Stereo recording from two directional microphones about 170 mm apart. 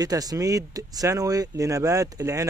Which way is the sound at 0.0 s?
20° right (ahead or behind).